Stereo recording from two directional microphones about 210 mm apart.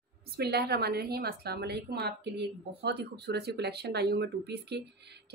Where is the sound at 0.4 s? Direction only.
50° right (ahead or behind).